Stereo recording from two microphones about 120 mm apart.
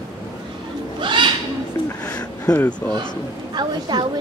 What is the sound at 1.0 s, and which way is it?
Bird, 40° right (ahead or behind).